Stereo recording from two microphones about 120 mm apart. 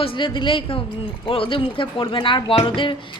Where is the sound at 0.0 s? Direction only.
45° left (ahead or behind).